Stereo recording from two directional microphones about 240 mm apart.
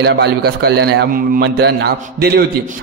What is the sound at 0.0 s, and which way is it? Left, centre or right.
A man's voice, right.